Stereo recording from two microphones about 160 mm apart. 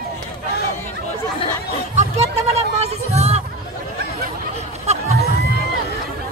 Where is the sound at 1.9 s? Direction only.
45° right (ahead or behind).